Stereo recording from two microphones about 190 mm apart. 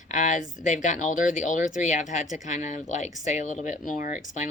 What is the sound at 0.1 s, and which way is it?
Speech, 40° left (ahead or behind).